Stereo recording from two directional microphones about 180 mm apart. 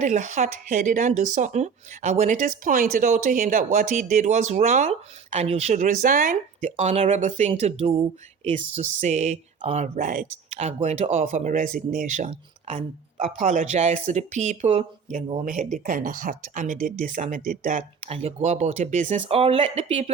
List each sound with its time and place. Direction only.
0.0 s speech: 40° right (ahead or behind)